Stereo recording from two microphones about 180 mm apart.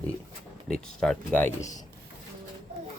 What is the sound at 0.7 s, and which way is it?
Speech, 5° left (ahead or behind).